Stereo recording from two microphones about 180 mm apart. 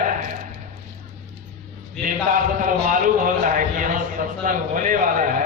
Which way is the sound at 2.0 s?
50° right (ahead or behind).